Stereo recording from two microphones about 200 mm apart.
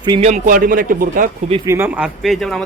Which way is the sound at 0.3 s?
45° right (ahead or behind).